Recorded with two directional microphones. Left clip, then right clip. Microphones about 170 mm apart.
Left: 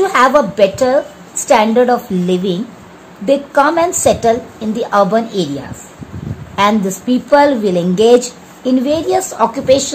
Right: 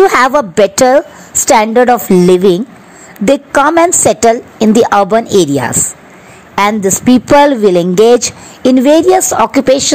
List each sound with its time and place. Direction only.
0.0 s a woman's voice: 55° right (ahead or behind)
6.5 s a woman's voice: 60° right (ahead or behind)